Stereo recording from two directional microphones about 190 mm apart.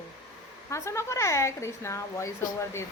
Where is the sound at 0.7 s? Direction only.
15° left (ahead or behind).